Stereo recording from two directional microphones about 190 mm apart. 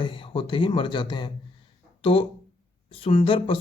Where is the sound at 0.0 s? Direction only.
25° left (ahead or behind).